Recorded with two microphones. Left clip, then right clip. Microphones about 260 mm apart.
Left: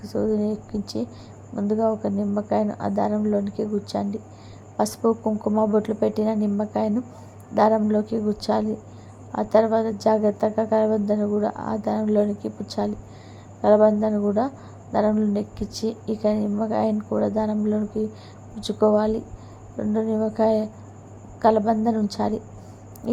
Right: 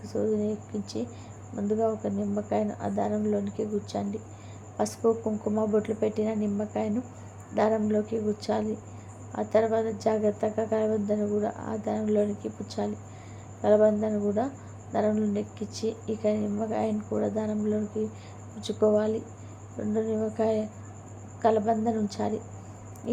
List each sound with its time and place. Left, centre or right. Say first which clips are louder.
0.0 s speech: left 4 dB; left